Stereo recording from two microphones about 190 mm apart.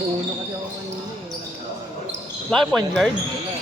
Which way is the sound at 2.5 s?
Centre (ahead or behind).